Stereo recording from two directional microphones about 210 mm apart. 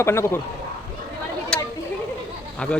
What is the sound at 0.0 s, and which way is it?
Speech, 10° left (ahead or behind).